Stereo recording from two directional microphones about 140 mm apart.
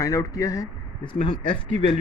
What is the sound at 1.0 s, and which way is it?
Speech, 35° left (ahead or behind).